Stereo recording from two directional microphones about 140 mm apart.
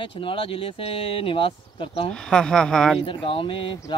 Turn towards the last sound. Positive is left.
turn(degrees=35)  # may be behind; listen again after turning